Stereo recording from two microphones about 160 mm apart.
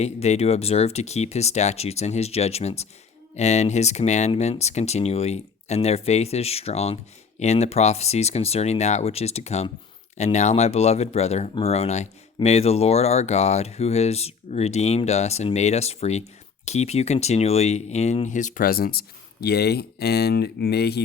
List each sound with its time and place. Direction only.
0.0 s speech: 40° left (ahead or behind); by 21.0 s 90° left